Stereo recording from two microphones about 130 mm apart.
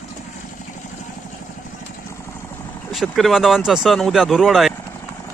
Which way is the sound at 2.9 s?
Centre (ahead or behind).